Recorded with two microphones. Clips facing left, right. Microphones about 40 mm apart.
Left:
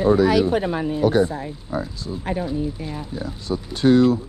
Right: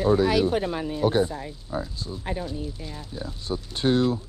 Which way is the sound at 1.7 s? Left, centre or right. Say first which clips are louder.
Left 4 dB; left.